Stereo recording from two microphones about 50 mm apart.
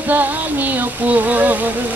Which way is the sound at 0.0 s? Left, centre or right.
Right.